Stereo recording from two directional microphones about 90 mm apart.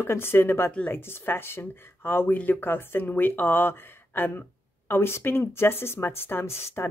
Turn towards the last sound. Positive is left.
turn(degrees=25)  # may be behind; listen again after turning